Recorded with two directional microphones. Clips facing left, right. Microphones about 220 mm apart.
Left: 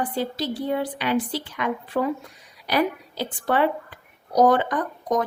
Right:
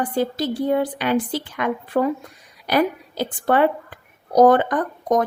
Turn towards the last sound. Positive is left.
turn(degrees=-50)  # may be behind; listen again after turning